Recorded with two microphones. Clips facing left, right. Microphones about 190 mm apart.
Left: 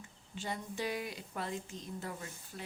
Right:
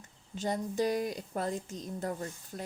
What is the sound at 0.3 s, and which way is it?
A woman's voice, 40° right (ahead or behind).